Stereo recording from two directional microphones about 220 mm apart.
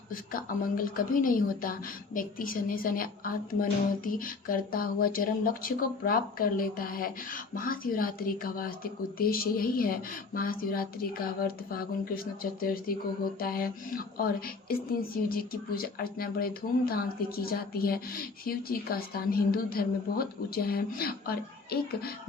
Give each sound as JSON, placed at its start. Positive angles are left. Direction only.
{"t": 0.1, "sound": "a woman's voice", "side_deg": 40}